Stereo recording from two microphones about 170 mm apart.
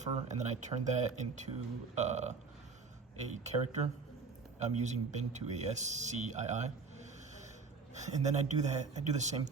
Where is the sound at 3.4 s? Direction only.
40° right (ahead or behind).